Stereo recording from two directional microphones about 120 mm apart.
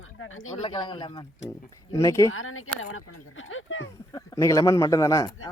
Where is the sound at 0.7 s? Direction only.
40° left (ahead or behind).